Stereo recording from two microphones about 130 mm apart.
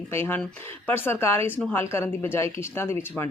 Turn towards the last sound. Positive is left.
turn(degrees=20)  # may be behind; listen again after turning